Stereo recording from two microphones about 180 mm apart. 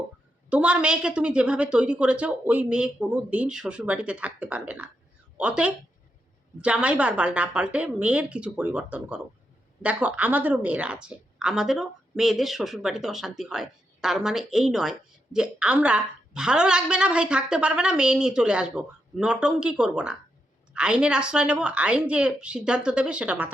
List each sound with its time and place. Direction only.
0.5 s a woman's voice: 5° right (ahead or behind)